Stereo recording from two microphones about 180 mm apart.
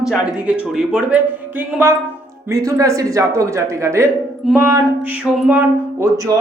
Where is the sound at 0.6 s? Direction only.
5° right (ahead or behind).